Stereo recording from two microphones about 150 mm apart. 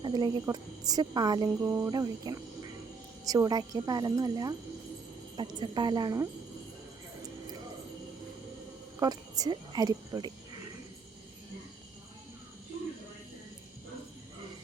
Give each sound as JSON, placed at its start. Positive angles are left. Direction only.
{"t": 0.0, "sound": "speech", "side_deg": -30}
{"t": 9.0, "sound": "speech", "side_deg": -25}